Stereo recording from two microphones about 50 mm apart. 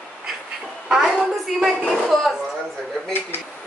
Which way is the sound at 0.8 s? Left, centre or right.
Centre.